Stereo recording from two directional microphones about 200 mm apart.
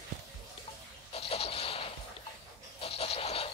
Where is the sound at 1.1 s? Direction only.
30° left (ahead or behind).